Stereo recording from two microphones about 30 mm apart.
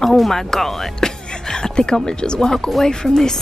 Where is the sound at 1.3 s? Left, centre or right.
Left.